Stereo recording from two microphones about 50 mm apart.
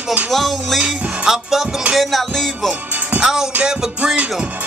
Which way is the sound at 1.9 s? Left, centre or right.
Centre.